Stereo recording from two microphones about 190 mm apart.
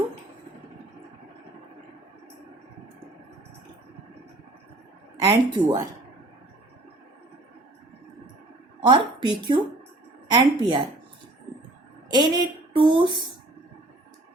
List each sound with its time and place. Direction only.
5.2 s a woman's voice: 20° right (ahead or behind)
8.8 s a woman's voice: 25° right (ahead or behind)
12.0 s a woman's voice: 25° right (ahead or behind)